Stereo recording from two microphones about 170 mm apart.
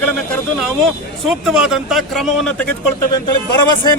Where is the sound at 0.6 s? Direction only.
Centre (ahead or behind).